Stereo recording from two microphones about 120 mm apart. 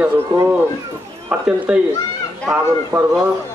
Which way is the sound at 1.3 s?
10° right (ahead or behind).